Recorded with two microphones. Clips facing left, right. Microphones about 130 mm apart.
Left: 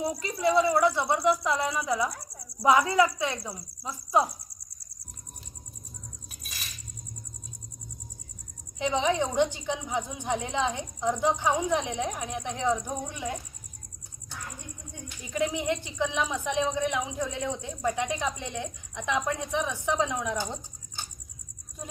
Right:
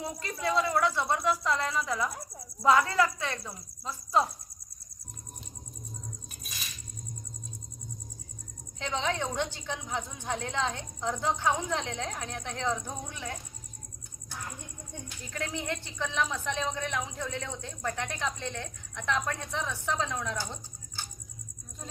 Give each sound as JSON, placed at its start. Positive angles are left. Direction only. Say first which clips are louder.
{"t": 0.0, "sound": "speech", "louder": "left 6 dB", "side_deg": 25}
{"t": 0.7, "sound": "speech", "louder": "left 4 dB", "side_deg": 10}
{"t": 6.4, "sound": "coin", "louder": "left 2 dB", "side_deg": 0}
{"t": 8.8, "sound": "speech", "louder": "left 6 dB", "side_deg": 15}
{"t": 15.2, "sound": "speech", "louder": "left 8 dB", "side_deg": 15}